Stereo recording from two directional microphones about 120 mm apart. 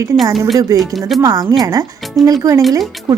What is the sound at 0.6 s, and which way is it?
A woman's voice, 30° right (ahead or behind).